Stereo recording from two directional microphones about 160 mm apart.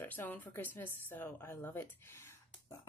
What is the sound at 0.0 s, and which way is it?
A woman's voice, 10° left (ahead or behind).